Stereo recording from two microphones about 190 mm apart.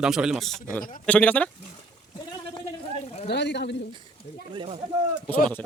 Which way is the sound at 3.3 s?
65° left (ahead or behind).